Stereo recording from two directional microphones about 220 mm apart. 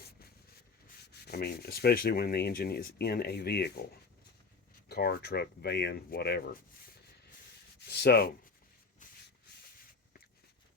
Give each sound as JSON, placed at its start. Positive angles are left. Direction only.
{"t": 1.3, "sound": "speech", "side_deg": 45}
{"t": 4.9, "sound": "speech", "side_deg": 45}
{"t": 7.9, "sound": "sanding", "side_deg": 45}